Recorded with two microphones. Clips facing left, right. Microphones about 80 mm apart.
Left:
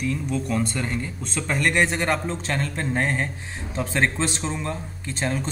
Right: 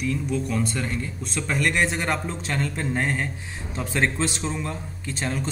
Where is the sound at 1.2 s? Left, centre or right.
Centre.